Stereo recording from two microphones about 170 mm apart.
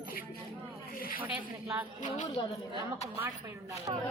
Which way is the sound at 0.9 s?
60° left (ahead or behind).